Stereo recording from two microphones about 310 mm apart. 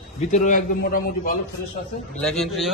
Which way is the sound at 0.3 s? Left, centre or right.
Left.